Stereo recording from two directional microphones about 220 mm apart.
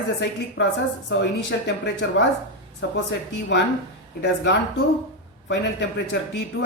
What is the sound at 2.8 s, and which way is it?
Speech, 55° left (ahead or behind).